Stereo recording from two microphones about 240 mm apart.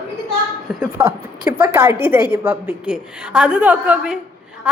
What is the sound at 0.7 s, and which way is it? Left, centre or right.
A woman's voice, centre.